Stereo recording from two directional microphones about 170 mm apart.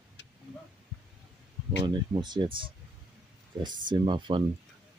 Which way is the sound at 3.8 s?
30° right (ahead or behind).